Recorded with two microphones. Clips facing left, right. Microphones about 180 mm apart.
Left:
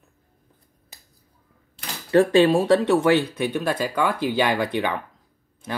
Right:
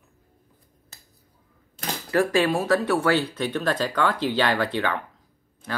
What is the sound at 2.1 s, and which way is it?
Speech, 30° left (ahead or behind).